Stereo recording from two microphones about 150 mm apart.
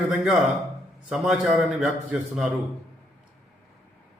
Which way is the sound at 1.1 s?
5° right (ahead or behind).